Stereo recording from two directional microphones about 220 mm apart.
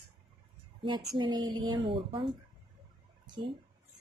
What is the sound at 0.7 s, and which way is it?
Speech, 20° right (ahead or behind).